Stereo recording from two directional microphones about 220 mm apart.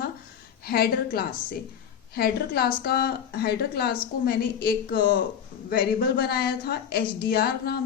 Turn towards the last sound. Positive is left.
turn(degrees=45)  # may be behind; listen again after turning